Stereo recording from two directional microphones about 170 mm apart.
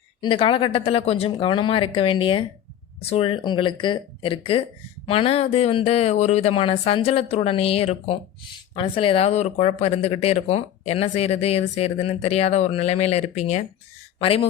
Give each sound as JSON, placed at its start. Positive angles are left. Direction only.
{"t": 0.2, "sound": "speech", "side_deg": 30}